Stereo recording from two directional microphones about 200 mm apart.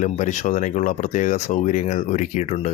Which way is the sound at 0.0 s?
35° left (ahead or behind).